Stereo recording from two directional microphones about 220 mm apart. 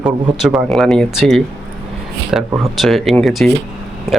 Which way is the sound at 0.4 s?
Centre (ahead or behind).